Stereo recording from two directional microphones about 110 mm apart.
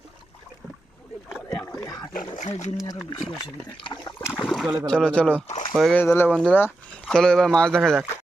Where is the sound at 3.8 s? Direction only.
45° left (ahead or behind).